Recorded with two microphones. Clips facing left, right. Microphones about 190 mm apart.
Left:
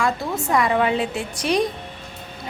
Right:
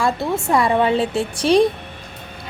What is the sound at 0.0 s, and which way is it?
A woman's voice, 30° right (ahead or behind).